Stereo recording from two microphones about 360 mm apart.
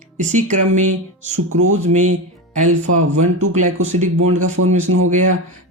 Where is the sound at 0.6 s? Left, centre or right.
Right.